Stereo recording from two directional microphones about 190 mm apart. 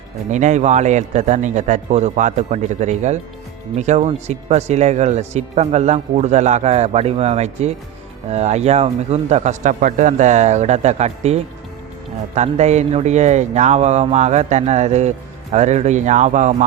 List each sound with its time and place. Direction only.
0.3 s speech: 40° right (ahead or behind)